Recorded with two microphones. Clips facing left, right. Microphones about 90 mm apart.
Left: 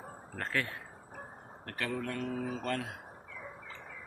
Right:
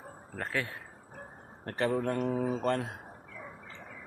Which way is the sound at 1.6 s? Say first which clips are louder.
Right 7 dB; 30° right (ahead or behind).